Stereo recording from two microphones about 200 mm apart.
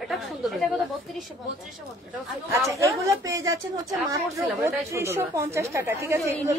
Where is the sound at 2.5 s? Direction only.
15° right (ahead or behind).